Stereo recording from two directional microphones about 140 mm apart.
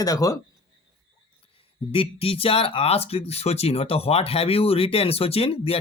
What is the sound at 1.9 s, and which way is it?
Speech, 40° left (ahead or behind).